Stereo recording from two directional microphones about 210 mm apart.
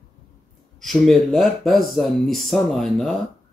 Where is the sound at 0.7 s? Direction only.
Centre (ahead or behind).